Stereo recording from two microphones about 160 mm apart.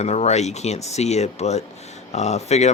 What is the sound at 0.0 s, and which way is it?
Speech, 45° left (ahead or behind).